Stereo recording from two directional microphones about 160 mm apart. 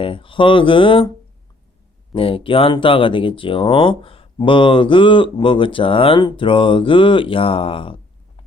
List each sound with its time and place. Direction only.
0.0 s speech: 35° left (ahead or behind)
2.1 s speech: 35° left (ahead or behind)